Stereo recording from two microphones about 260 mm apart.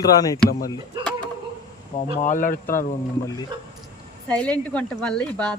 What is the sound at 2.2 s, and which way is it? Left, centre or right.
Speech, left.